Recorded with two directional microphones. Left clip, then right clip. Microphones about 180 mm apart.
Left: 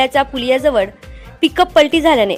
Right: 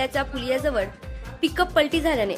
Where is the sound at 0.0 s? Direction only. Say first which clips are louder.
Left 11 dB; 30° left (ahead or behind).